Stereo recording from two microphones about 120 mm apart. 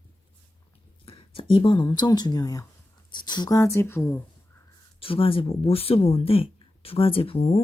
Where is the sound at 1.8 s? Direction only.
35° left (ahead or behind).